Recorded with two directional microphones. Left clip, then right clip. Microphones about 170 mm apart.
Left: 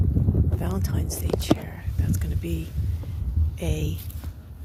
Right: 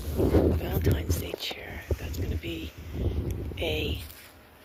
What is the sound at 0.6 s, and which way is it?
Speech, 10° left (ahead or behind).